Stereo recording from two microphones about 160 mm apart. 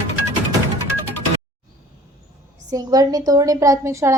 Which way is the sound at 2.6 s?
25° right (ahead or behind).